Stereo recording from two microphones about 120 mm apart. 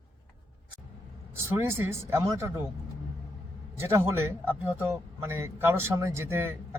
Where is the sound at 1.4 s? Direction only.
20° right (ahead or behind).